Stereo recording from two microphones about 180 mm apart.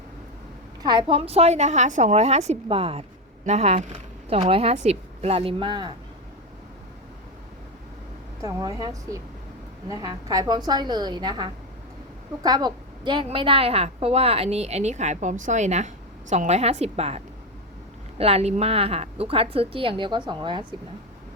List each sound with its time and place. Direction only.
0.8 s a woman's voice: 25° right (ahead or behind)
8.4 s a woman's voice: 20° right (ahead or behind)